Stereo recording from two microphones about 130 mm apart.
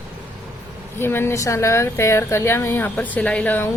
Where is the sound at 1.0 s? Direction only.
20° left (ahead or behind).